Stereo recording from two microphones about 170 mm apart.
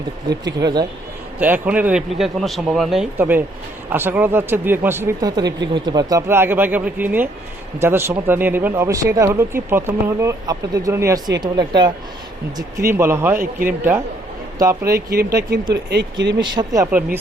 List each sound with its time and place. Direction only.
0.3 s speech: 25° right (ahead or behind)
1.4 s speech: 10° right (ahead or behind)
14.6 s speech: 20° right (ahead or behind)
15.4 s speech: 75° right (ahead or behind)
16.4 s speech: 25° right (ahead or behind)